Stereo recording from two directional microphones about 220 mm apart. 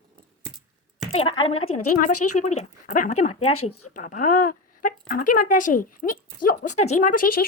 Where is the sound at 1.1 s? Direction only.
25° left (ahead or behind).